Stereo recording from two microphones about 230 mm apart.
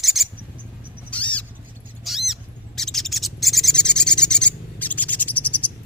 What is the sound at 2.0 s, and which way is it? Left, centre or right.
Owl, centre.